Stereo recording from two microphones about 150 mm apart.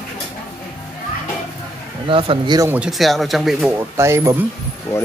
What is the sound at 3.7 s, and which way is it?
Speech, 15° right (ahead or behind).